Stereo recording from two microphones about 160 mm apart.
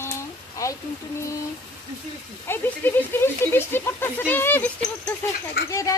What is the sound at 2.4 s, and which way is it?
Speech, 10° left (ahead or behind).